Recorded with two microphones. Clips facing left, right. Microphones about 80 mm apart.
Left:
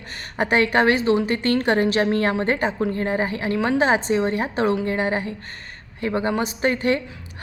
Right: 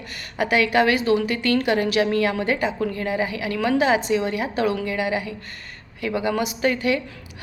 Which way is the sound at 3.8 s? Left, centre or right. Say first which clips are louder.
Left 1 dB; left.